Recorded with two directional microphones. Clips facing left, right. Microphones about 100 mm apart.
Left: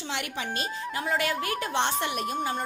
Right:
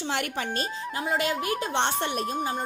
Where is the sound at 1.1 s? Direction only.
20° right (ahead or behind).